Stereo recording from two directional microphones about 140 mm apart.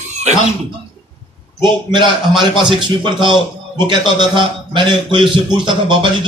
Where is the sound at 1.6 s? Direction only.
35° right (ahead or behind).